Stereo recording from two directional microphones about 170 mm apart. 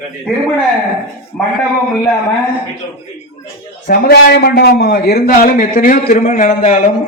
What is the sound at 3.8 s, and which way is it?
A man's voice, 65° left (ahead or behind).